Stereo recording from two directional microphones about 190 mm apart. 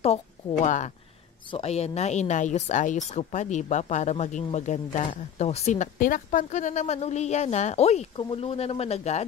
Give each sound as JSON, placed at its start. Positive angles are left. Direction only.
{"t": 0.0, "sound": "a woman's voice", "side_deg": 30}